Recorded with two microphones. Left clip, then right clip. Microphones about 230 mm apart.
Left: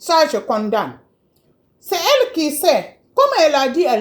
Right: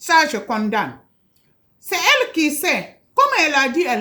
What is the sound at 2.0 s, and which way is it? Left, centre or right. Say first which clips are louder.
Speech: left 1 dB; right.